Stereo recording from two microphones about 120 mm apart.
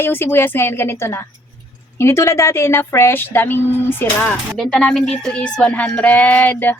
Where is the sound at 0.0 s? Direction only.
20° left (ahead or behind).